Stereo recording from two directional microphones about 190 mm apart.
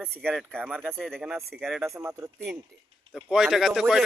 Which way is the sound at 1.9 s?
15° right (ahead or behind).